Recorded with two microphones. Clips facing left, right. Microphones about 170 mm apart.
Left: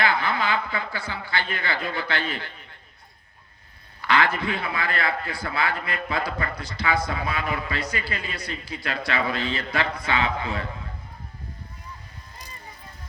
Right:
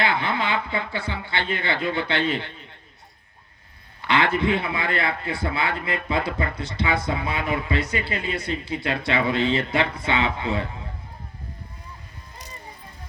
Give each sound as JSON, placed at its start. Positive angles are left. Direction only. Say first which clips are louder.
{"t": 0.0, "sound": "a man's voice", "louder": "even", "side_deg": -25}
{"t": 4.0, "sound": "a man's voice", "louder": "right 2 dB", "side_deg": -25}